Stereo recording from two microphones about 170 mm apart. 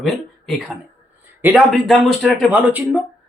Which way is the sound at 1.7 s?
Centre (ahead or behind).